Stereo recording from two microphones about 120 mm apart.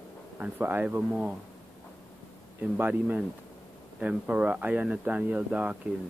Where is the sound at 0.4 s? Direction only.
15° right (ahead or behind).